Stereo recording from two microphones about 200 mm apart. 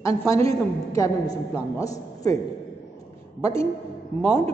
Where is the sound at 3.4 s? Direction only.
15° left (ahead or behind).